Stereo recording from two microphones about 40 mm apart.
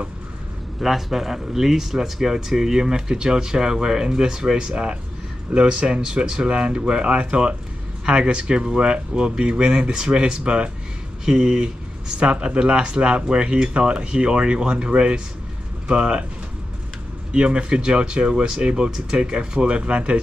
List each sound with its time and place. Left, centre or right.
0.7 s speech: centre; by 16.3 s right
17.3 s speech: right